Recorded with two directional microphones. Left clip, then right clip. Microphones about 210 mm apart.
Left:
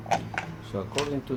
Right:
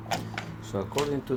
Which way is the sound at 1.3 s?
25° right (ahead or behind).